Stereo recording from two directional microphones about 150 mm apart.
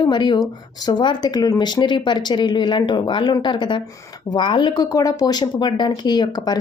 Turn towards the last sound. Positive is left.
turn(degrees=25)  # may be behind; listen again after turning